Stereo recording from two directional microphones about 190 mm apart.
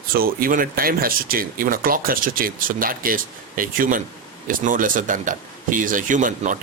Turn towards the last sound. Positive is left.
turn(degrees=-45)  # may be behind; listen again after turning